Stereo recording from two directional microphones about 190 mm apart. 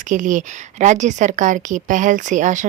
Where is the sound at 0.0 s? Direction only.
40° right (ahead or behind).